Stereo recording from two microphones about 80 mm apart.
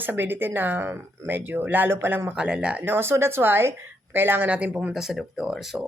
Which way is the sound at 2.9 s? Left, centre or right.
Right.